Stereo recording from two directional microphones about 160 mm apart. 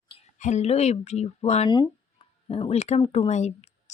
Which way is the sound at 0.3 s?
50° left (ahead or behind).